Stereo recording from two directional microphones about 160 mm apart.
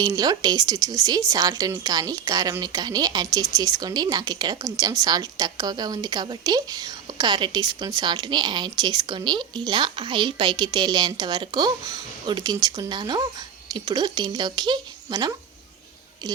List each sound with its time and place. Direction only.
0.0 s speech: 25° right (ahead or behind)